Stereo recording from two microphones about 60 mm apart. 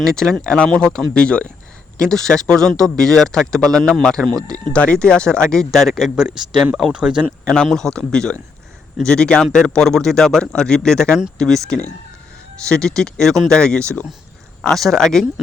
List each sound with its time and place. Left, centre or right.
0.0 s speech: centre
0.4 s speech: centre
6.1 s speech: centre
7.3 s speech: centre